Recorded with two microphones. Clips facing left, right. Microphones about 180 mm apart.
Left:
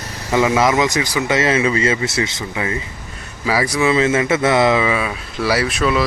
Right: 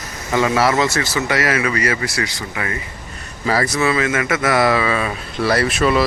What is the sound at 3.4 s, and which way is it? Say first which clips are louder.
Speech: left 1 dB; 10° left (ahead or behind).